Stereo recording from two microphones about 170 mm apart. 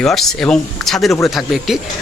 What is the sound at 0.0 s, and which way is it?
A man's voice, centre (ahead or behind).